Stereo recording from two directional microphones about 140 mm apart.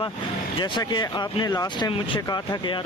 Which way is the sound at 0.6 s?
35° left (ahead or behind).